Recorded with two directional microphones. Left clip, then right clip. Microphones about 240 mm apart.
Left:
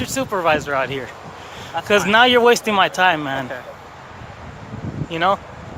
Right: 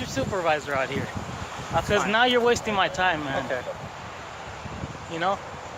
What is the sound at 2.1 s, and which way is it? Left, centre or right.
Speech, left.